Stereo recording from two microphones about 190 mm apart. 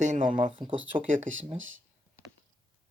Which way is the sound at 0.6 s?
Centre (ahead or behind).